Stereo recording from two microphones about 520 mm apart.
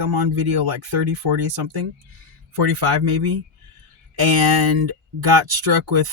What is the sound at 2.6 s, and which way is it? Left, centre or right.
Speech, right.